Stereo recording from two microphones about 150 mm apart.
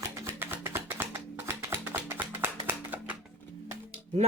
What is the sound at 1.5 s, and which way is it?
Music, 15° right (ahead or behind).